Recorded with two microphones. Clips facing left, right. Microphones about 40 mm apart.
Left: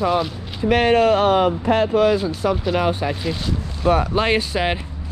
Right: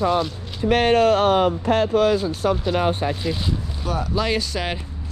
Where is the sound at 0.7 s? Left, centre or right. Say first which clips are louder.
Left 1 dB; left.